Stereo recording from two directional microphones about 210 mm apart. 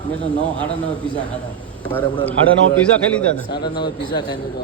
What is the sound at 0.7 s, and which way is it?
Speech, 5° left (ahead or behind).